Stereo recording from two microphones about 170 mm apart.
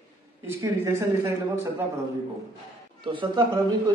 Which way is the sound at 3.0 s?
30° right (ahead or behind).